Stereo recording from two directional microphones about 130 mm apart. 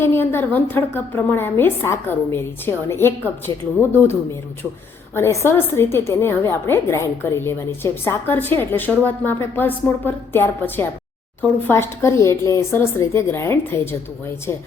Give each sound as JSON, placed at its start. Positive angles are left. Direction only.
{"t": 0.0, "sound": "a woman's voice", "side_deg": 15}